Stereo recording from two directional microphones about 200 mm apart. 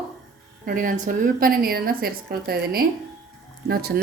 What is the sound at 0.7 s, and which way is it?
A woman's voice, 45° right (ahead or behind).